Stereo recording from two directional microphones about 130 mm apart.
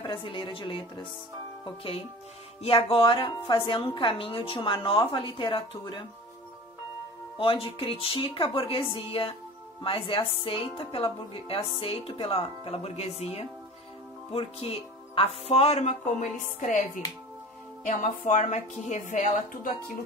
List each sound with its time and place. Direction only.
0.0 s a woman's voice: 40° left (ahead or behind)
7.3 s speech: 45° left (ahead or behind); by 16.3 s 60° left (ahead or behind)
17.8 s a woman's voice: 65° left (ahead or behind)